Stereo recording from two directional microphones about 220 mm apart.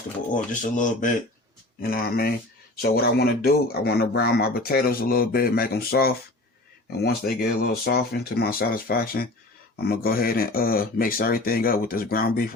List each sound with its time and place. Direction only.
0.3 s speech: 35° left (ahead or behind)